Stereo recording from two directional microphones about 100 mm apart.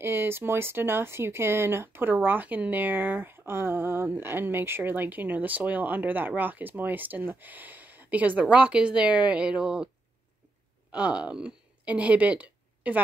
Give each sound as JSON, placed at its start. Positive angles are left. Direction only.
{"t": 0.0, "sound": "speech", "side_deg": -25}
{"t": 10.9, "sound": "a woman's voice", "side_deg": -10}